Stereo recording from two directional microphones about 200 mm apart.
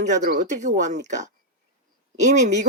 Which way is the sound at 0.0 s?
35° right (ahead or behind).